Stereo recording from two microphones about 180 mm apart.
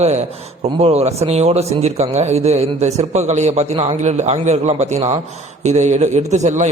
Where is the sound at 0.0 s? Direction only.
40° right (ahead or behind).